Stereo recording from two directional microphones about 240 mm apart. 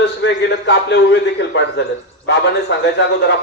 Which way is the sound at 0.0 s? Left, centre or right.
Left.